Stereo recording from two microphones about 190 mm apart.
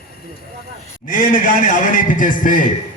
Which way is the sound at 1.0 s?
45° left (ahead or behind).